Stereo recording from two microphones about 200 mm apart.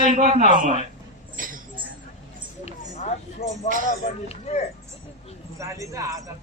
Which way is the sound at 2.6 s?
35° left (ahead or behind).